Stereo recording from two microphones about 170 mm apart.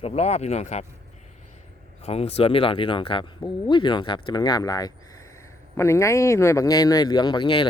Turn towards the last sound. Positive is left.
turn(degrees=30)  # may be behind; listen again after turning